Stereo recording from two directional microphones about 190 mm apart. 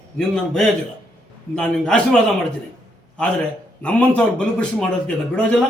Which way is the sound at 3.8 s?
5° left (ahead or behind).